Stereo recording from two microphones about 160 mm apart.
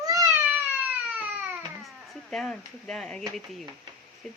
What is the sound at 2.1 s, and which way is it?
Speech, centre (ahead or behind).